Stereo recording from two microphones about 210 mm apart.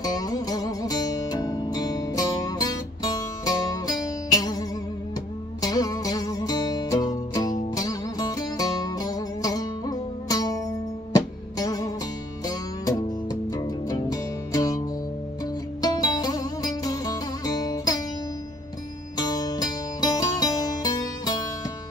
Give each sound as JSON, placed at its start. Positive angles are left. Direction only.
{"t": 0.0, "sound": "music", "side_deg": 15}
{"t": 15.8, "sound": "music", "side_deg": 20}
{"t": 19.1, "sound": "music", "side_deg": 20}